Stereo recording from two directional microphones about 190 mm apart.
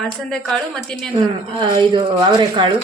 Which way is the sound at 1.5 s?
25° right (ahead or behind).